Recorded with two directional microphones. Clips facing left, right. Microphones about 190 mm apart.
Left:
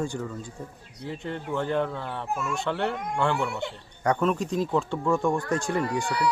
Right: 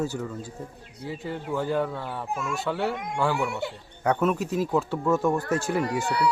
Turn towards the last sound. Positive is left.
turn(degrees=-5)  # may be behind; listen again after turning